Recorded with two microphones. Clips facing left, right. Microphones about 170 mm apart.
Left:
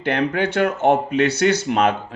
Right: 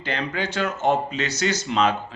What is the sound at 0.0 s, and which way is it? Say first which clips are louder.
Speech: left 7 dB; 60° left (ahead or behind).